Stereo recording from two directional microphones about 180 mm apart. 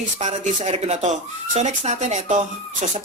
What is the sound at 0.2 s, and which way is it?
Speech, 40° right (ahead or behind).